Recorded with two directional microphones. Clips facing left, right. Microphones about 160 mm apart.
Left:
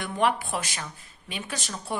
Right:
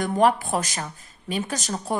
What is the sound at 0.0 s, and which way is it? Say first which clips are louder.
Speech: right 6 dB; 40° right (ahead or behind).